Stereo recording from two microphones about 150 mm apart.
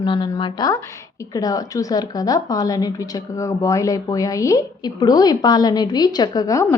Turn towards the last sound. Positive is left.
turn(degrees=25)  # may be behind; listen again after turning